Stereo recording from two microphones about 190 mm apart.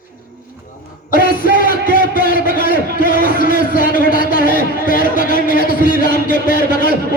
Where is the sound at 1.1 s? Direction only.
45° left (ahead or behind).